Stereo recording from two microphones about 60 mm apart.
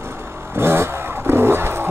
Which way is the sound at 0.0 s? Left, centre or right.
Right.